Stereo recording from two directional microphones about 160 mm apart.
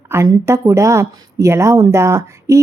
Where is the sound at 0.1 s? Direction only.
20° right (ahead or behind).